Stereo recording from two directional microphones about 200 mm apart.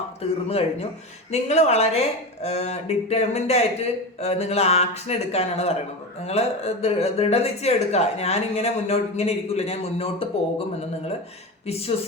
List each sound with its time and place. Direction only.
0.2 s speech: 30° left (ahead or behind)
11.6 s speech: 30° left (ahead or behind)